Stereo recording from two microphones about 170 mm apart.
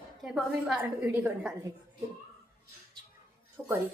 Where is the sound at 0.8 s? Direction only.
10° right (ahead or behind).